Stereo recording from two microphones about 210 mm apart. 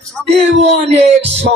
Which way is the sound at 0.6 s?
30° right (ahead or behind).